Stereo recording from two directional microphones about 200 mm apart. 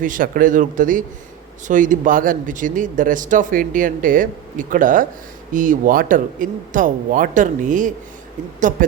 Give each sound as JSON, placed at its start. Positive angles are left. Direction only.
{"t": 0.0, "sound": "speech", "side_deg": -45}